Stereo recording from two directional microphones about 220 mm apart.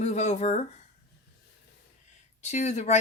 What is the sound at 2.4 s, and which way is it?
Speech, 30° left (ahead or behind).